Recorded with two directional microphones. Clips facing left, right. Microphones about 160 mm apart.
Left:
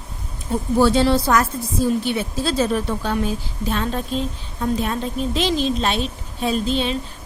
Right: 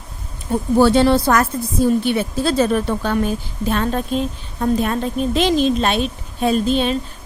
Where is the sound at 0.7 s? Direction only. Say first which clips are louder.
Right 3 dB; 65° right (ahead or behind).